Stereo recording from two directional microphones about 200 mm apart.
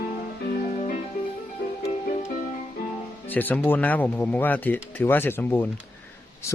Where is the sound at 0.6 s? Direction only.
35° left (ahead or behind).